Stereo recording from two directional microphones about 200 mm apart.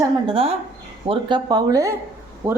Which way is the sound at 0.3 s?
30° right (ahead or behind).